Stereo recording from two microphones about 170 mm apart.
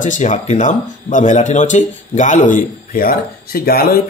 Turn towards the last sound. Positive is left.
turn(degrees=65)  # may be behind; listen again after turning